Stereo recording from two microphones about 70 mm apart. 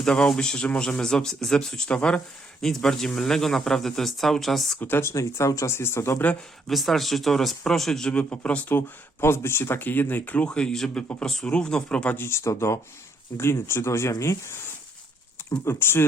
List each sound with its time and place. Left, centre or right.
0.0 s speech: centre
4.8 s speech: left
5.0 s speech: left
6.7 s speech: centre
9.2 s speech: left; by 12.1 s centre
12.1 s speech: left
15.6 s speech: left